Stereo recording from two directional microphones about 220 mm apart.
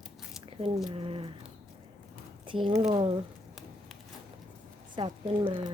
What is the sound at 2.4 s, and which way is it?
Speech, 20° right (ahead or behind).